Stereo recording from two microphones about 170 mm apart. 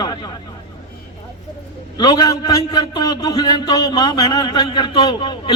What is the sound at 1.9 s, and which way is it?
A man's voice, 20° left (ahead or behind).